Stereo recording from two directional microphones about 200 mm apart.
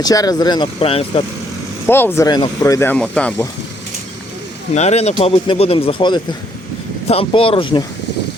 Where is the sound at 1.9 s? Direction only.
10° left (ahead or behind).